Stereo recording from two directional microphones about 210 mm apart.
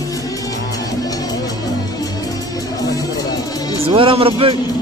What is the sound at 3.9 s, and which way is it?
Speech, 25° right (ahead or behind).